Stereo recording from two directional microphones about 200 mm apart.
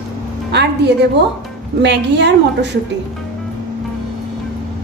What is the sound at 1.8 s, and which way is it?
Speech, 60° right (ahead or behind).